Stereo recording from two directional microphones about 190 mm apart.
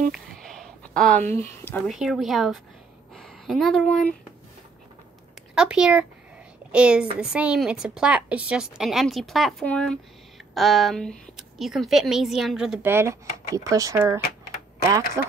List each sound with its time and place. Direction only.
0.1 s a sound: centre (ahead or behind)
1.4 s speech: 10° left (ahead or behind)
1.9 s a woman's voice: centre (ahead or behind)
5.5 s a woman's voice: 5° right (ahead or behind)